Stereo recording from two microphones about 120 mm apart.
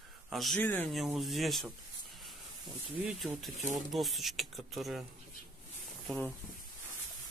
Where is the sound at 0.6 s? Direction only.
15° left (ahead or behind).